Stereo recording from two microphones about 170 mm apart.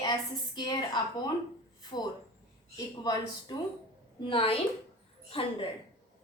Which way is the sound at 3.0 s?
25° left (ahead or behind).